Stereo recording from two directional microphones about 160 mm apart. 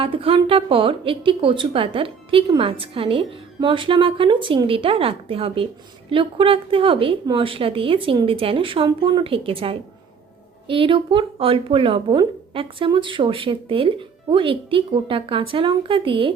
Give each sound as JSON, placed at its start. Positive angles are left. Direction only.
{"t": 0.0, "sound": "a woman's voice", "side_deg": -35}